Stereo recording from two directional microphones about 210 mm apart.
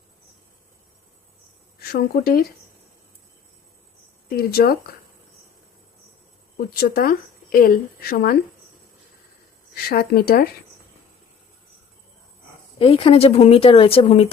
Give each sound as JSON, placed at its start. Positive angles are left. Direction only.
{"t": 1.8, "sound": "speech", "side_deg": 45}
{"t": 4.3, "sound": "speech", "side_deg": 45}
{"t": 6.6, "sound": "speech", "side_deg": 45}
{"t": 9.7, "sound": "speech", "side_deg": 45}
{"t": 12.8, "sound": "speech", "side_deg": 25}